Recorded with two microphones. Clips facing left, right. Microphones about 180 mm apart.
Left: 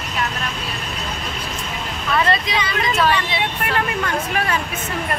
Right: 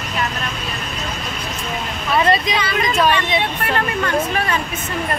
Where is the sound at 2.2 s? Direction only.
20° right (ahead or behind).